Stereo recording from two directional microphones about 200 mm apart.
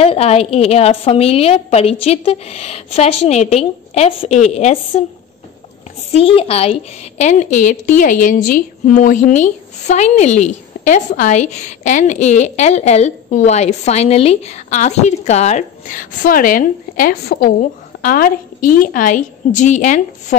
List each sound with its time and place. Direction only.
0.0 s a woman's voice: 30° left (ahead or behind)
6.1 s a woman's voice: 30° left (ahead or behind)